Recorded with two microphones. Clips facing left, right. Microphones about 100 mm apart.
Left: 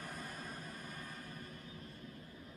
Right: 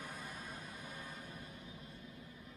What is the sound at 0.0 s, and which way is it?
Music, 15° right (ahead or behind).